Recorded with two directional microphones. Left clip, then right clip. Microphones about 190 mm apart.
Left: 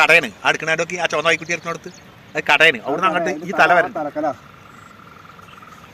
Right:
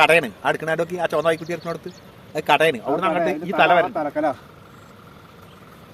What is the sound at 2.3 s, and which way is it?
Speech, 15° right (ahead or behind).